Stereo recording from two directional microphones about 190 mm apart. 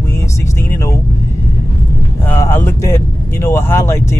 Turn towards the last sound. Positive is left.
turn(degrees=15)  # may be behind; listen again after turning